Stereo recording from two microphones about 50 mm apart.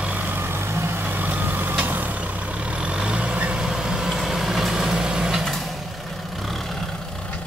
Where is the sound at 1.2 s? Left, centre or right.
Right.